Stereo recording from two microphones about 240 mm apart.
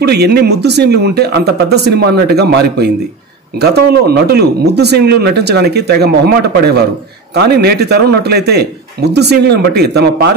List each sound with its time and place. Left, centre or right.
0.0 s speech: right